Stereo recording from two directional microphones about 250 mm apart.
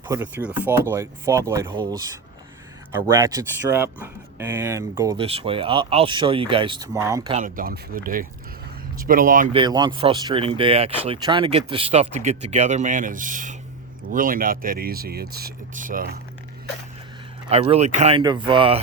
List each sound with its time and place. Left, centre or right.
0.1 s speech: centre
3.2 s speech: centre
7.3 s speech: right
9.6 s speech: centre; by 16.1 s right
17.5 s speech: right